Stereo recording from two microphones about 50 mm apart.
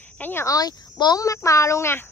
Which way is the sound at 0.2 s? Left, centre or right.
Left.